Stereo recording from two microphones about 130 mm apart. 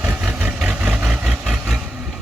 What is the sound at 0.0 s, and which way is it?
Vehicle, 15° right (ahead or behind).